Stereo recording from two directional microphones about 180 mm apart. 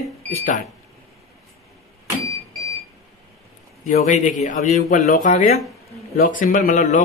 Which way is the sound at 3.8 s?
45° left (ahead or behind).